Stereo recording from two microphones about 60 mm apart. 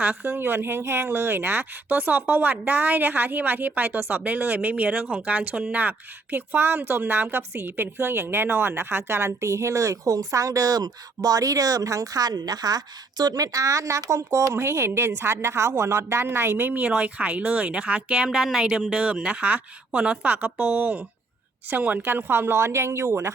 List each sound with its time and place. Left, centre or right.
0.0 s a woman's voice: right
16.8 s a woman's voice: right